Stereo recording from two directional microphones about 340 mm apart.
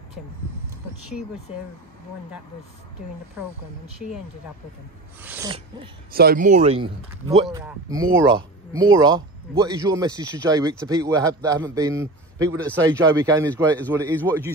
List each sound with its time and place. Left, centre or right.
5.2 s a man's voice: centre
6.1 s speech: right
7.4 s a man's voice: centre